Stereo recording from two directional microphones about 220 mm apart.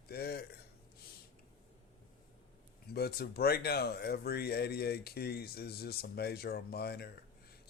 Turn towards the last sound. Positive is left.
turn(degrees=45)  # may be behind; listen again after turning